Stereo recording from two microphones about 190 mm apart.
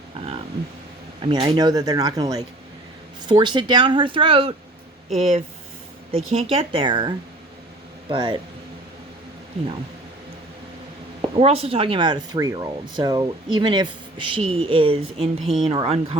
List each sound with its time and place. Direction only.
1.2 s speech: 25° right (ahead or behind)
8.1 s speech: 25° right (ahead or behind)
11.3 s speech: 30° right (ahead or behind)